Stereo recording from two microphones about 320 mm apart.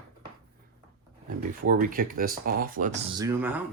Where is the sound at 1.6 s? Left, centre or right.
Right; by 3.6 s centre.